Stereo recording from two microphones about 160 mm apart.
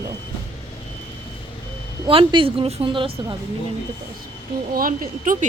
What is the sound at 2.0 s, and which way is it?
Speech, 30° right (ahead or behind).